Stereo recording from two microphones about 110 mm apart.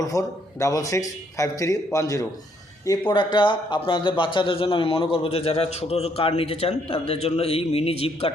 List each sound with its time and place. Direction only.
0.0 s a man's voice: 30° left (ahead or behind)
3.1 s a man's voice: 45° left (ahead or behind); by 8.3 s 65° left (ahead or behind)